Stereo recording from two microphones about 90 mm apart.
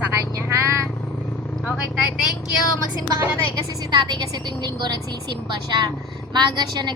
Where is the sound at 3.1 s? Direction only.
40° right (ahead or behind).